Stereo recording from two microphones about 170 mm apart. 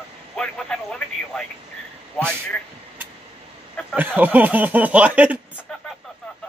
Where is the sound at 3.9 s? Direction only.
10° right (ahead or behind).